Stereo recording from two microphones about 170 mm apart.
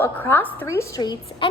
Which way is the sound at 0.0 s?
10° left (ahead or behind).